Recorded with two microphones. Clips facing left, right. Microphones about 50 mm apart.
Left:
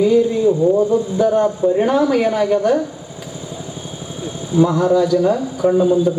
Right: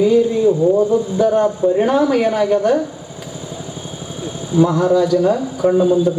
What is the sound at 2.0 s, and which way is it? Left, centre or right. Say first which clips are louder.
Speech: right 1 dB; right.